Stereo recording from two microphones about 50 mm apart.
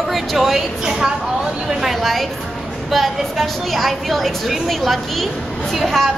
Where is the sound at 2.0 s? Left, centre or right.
Centre.